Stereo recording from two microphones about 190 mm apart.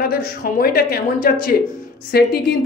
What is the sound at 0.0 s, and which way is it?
Speech, 50° left (ahead or behind).